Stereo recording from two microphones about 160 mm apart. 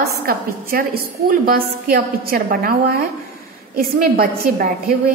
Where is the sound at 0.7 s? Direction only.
65° right (ahead or behind).